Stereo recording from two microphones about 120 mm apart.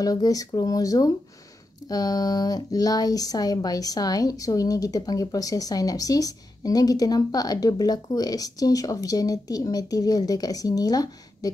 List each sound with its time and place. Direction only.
0.0 s speech: 30° left (ahead or behind)